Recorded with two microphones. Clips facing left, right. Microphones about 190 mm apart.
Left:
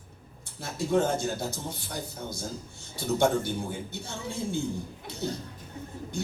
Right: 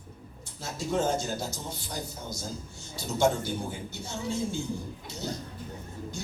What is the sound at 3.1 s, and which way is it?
A man's voice, 60° left (ahead or behind).